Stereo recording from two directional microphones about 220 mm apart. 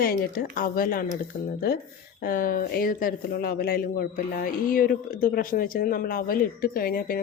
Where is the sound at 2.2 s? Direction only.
40° left (ahead or behind).